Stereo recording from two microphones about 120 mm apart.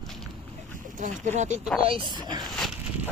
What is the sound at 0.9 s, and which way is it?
Speech, 90° right.